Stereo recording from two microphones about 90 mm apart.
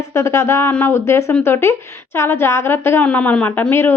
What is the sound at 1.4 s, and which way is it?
A woman's voice, 30° left (ahead or behind).